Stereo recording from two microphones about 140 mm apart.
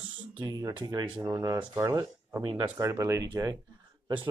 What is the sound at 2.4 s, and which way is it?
Speech, 25° right (ahead or behind).